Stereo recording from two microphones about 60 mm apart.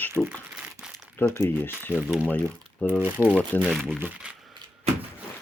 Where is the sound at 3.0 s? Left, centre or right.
Right.